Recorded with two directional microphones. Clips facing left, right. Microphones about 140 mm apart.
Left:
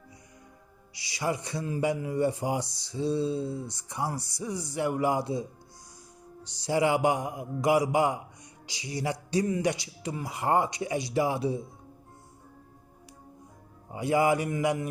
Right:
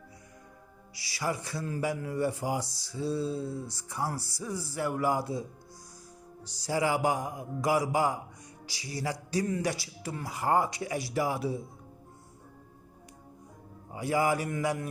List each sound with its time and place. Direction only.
0.9 s a man's voice: 20° left (ahead or behind)
6.6 s a man's voice: 25° left (ahead or behind)
13.9 s a man's voice: 20° left (ahead or behind)